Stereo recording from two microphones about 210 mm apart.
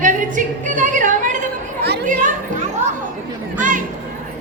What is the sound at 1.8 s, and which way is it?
Chatter, 50° right (ahead or behind).